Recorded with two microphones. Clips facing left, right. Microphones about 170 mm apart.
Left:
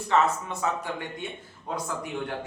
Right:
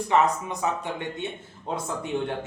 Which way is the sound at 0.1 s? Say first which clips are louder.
Right 1 dB; 15° right (ahead or behind).